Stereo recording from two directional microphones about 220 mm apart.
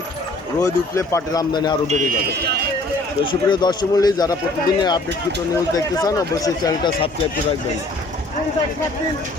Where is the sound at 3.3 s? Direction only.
20° left (ahead or behind).